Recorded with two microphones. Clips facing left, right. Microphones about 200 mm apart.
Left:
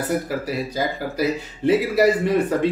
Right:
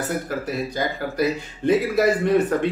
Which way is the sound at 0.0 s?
5° left (ahead or behind).